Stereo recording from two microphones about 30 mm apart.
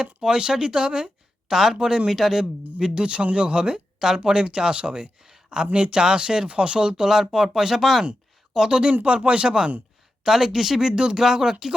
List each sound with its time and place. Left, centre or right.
0.0 s speech: right
1.5 s speech: centre
1.7 s speech: right
2.0 s speech: centre
2.7 s speech: right
7.1 s speech: centre
9.0 s speech: right
10.2 s speech: centre
10.8 s speech: right
11.2 s speech: centre